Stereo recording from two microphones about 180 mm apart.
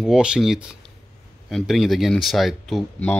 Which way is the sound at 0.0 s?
5° right (ahead or behind).